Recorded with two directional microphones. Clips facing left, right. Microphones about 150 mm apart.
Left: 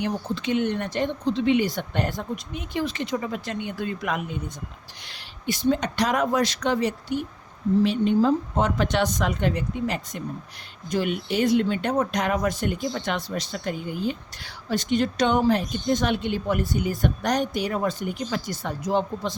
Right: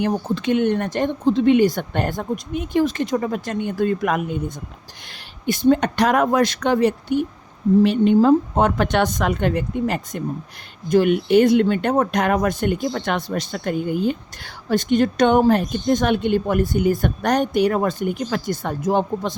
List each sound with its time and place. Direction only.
0.0 s speech: 50° right (ahead or behind)